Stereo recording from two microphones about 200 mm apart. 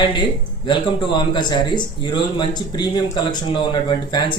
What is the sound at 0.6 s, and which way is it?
A man's voice, 25° left (ahead or behind).